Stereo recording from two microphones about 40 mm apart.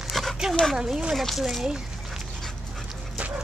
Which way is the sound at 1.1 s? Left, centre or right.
Centre.